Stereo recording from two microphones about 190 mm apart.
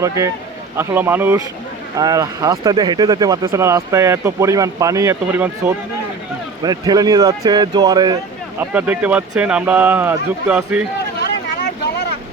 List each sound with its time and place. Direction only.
0.8 s speech: 10° right (ahead or behind)
8.7 s speech: 10° right (ahead or behind)
11.2 s vehicle: 65° left (ahead or behind)